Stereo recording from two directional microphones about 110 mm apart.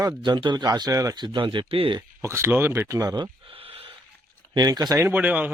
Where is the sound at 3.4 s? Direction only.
60° right (ahead or behind).